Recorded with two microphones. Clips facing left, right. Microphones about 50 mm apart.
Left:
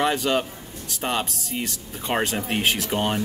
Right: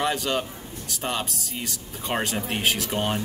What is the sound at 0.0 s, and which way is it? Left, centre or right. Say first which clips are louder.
Speech: left 3 dB; centre.